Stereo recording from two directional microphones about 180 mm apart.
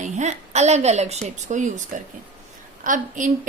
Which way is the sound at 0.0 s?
40° right (ahead or behind).